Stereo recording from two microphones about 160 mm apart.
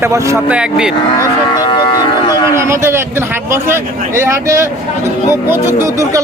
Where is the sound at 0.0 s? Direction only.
15° right (ahead or behind).